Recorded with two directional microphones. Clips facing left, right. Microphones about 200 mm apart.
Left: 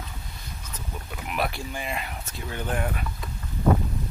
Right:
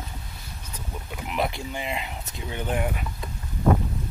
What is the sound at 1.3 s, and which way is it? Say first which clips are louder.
Speech: right 2 dB; 20° right (ahead or behind).